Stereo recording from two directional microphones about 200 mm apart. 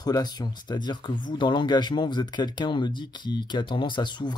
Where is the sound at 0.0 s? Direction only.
20° left (ahead or behind).